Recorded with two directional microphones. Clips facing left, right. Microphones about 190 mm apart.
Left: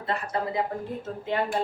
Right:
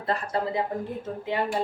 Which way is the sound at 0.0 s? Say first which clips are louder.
Right 2 dB; 35° right (ahead or behind).